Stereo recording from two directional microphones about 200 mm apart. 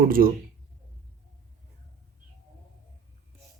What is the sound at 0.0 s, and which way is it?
Speech, 45° right (ahead or behind).